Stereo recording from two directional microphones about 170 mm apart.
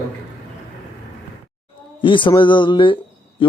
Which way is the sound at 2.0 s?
30° left (ahead or behind).